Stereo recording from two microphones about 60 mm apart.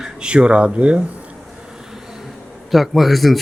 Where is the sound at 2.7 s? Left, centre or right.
Centre.